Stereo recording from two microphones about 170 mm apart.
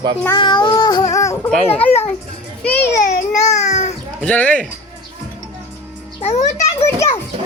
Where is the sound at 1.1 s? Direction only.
20° left (ahead or behind).